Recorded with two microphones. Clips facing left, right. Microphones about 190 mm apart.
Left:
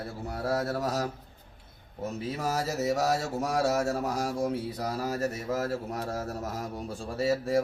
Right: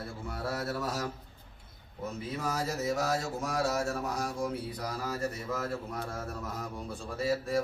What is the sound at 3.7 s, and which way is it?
Speech, 40° left (ahead or behind).